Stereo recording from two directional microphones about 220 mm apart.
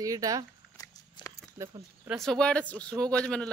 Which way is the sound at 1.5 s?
15° right (ahead or behind).